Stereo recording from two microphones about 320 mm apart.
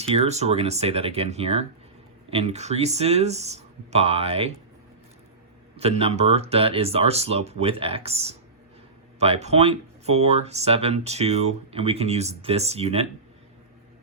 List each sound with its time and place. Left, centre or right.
0.0 s speech: centre
5.7 s speech: centre